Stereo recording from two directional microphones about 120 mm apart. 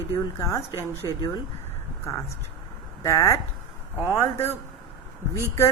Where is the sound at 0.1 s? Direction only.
25° left (ahead or behind).